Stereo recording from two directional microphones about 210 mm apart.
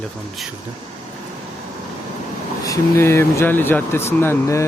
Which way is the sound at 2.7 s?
10° left (ahead or behind).